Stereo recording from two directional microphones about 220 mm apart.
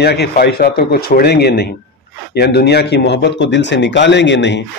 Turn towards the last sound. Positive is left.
turn(degrees=55)  # may be behind; listen again after turning